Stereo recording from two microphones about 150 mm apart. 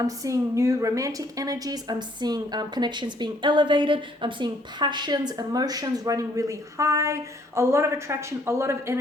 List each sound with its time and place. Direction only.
0.2 s a woman's voice: 20° right (ahead or behind)